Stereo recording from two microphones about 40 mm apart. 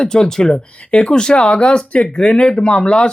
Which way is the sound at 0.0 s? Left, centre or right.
Centre.